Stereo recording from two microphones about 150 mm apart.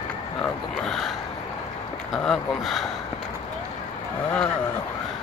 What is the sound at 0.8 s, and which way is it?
Gasp, centre (ahead or behind).